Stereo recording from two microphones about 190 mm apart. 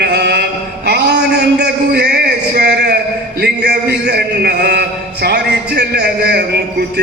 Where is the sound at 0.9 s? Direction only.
60° right (ahead or behind).